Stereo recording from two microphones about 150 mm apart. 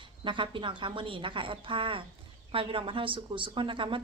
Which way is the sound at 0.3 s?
35° right (ahead or behind).